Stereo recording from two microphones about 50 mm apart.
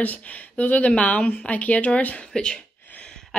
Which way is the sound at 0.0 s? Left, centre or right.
Left.